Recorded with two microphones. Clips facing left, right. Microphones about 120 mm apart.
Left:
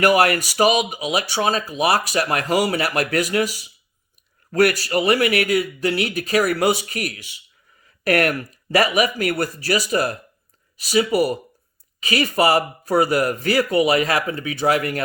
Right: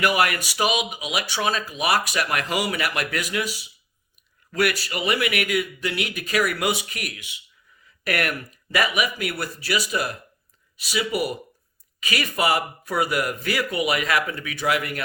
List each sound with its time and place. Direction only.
0.0 s speech: 40° left (ahead or behind)
11.9 s speech: 30° left (ahead or behind)